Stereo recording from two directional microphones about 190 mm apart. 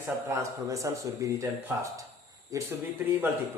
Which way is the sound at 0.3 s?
15° right (ahead or behind).